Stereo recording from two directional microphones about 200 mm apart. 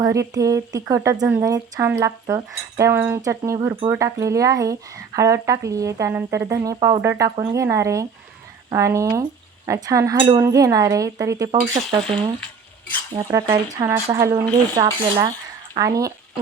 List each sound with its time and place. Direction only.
0.0 s speech: 15° right (ahead or behind)
13.5 s speech: 15° right (ahead or behind)